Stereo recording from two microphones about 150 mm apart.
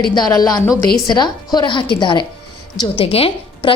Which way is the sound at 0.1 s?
25° left (ahead or behind).